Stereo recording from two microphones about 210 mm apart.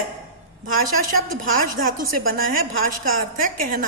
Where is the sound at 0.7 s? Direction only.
40° right (ahead or behind).